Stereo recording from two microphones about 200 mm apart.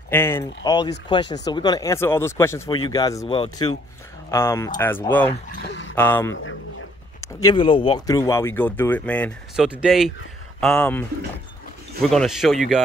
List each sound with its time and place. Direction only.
0.1 s speech: 10° left (ahead or behind)
5.5 s speech: 60° left (ahead or behind)
5.9 s speech: 10° left (ahead or behind)
9.6 s speech: 5° right (ahead or behind)